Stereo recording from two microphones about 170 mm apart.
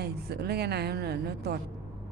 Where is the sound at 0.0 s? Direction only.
70° right (ahead or behind).